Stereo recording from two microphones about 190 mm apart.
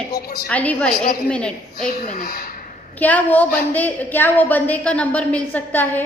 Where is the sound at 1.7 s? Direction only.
45° left (ahead or behind).